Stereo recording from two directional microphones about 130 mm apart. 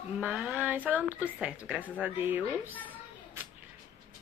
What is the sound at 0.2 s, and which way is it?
A woman's voice, 5° right (ahead or behind).